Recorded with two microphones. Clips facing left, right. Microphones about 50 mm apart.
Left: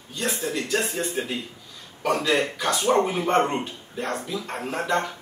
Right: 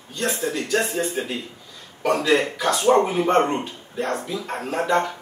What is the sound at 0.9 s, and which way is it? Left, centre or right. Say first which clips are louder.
Speech: right 3 dB; centre.